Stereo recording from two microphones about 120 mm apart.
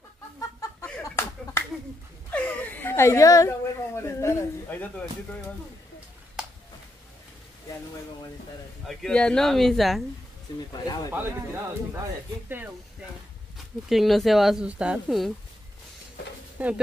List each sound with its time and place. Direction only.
0.4 s chicken: 25° left (ahead or behind)
1.0 s a sound: 20° left (ahead or behind)
2.3 s speech: 15° left (ahead or behind)
8.8 s speech: 5° left (ahead or behind)
11.1 s speech: 20° right (ahead or behind)
13.8 s speech: centre (ahead or behind)
16.5 s speech: 10° right (ahead or behind)